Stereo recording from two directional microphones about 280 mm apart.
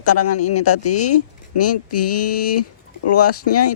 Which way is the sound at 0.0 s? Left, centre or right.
Left.